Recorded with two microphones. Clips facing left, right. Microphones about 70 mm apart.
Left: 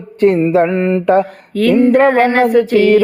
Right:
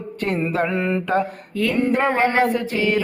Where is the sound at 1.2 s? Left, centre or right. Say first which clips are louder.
Left 7 dB; left.